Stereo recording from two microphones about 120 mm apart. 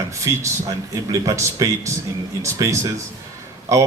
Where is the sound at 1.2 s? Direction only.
30° right (ahead or behind).